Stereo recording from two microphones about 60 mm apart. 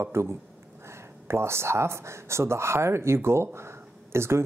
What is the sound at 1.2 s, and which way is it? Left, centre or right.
Speech, right.